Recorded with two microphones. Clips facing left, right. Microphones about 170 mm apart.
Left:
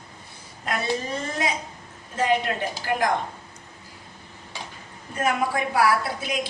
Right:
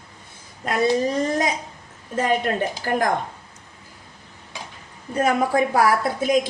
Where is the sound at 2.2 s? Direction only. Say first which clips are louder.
Right 2 dB; 45° right (ahead or behind).